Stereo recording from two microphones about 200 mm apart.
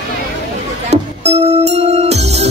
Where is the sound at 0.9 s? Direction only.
30° right (ahead or behind).